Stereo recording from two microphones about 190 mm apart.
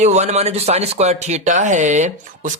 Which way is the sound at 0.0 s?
35° right (ahead or behind).